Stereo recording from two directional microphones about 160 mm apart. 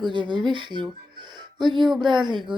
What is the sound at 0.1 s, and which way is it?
Speech, 30° right (ahead or behind).